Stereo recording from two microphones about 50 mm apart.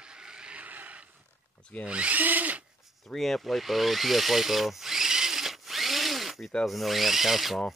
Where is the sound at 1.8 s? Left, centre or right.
Right.